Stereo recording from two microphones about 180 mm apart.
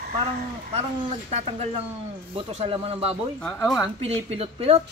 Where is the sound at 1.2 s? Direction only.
35° right (ahead or behind).